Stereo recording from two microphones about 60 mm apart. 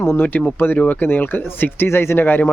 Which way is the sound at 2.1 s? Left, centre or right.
Left.